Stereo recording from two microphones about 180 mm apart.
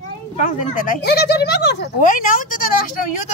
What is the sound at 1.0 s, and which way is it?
Speech, 65° left (ahead or behind).